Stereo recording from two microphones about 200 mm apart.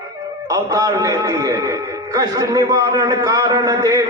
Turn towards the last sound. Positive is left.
turn(degrees=-15)  # may be behind; listen again after turning